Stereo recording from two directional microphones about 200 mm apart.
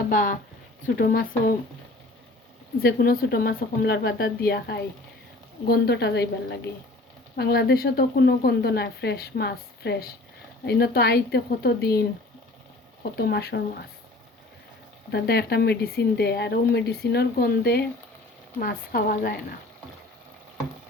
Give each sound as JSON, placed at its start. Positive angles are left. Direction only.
{"t": 0.1, "sound": "a sound", "side_deg": 45}
{"t": 0.9, "sound": "a woman's voice", "side_deg": 50}
{"t": 2.8, "sound": "a woman's voice", "side_deg": 45}
{"t": 15.1, "sound": "a woman's voice", "side_deg": 50}